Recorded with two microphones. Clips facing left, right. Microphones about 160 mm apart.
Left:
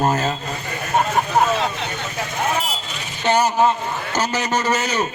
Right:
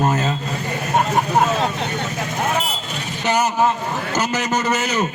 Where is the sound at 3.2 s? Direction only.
30° left (ahead or behind).